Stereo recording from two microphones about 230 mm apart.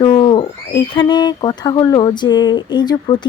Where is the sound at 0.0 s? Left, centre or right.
Centre.